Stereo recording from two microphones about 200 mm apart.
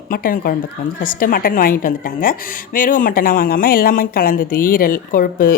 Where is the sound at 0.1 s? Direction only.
45° left (ahead or behind).